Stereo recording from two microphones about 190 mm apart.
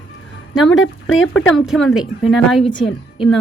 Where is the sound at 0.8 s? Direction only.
90° left.